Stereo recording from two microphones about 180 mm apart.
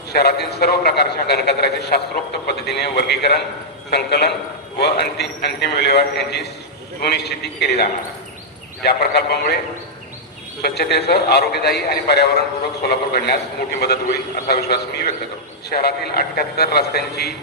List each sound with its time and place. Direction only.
0.1 s a man's voice: 65° left (ahead or behind)
10.6 s a man's voice: 65° left (ahead or behind)